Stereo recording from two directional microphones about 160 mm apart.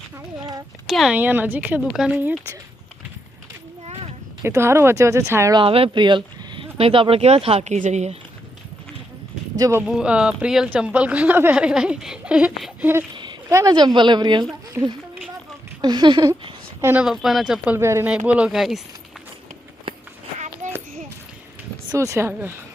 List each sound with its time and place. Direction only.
0.9 s speech: centre (ahead or behind)
4.4 s speech: 15° right (ahead or behind)
5.5 s speech: 35° right (ahead or behind)
9.6 s speech: 20° right (ahead or behind)
9.8 s speech: 5° right (ahead or behind)
13.5 s speech: 20° right (ahead or behind)
14.8 s speech: 15° right (ahead or behind)
15.8 s speech: 25° right (ahead or behind)
16.8 s speech: 10° right (ahead or behind)
17.7 s speech: 15° right (ahead or behind)
21.9 s speech: 20° right (ahead or behind)